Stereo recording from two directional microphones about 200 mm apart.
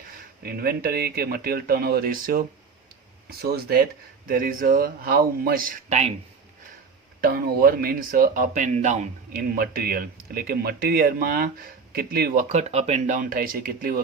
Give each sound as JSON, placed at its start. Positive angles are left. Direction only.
{"t": 0.4, "sound": "speech", "side_deg": -50}
{"t": 7.2, "sound": "speech", "side_deg": -50}
{"t": 12.5, "sound": "speech", "side_deg": -35}